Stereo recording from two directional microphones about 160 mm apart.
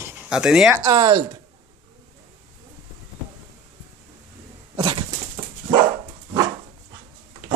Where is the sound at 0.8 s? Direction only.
25° right (ahead or behind).